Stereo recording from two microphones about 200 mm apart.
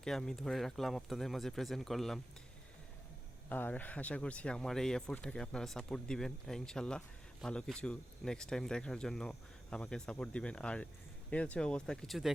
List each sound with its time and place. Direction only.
0.0 s speech: centre (ahead or behind)
3.5 s speech: 10° left (ahead or behind)